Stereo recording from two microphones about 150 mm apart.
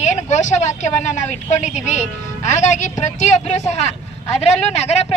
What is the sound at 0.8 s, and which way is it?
A woman's voice, 55° left (ahead or behind).